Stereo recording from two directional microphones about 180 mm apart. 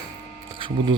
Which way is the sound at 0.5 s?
30° right (ahead or behind).